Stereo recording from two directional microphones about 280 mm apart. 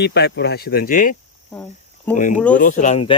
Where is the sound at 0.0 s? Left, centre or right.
Left.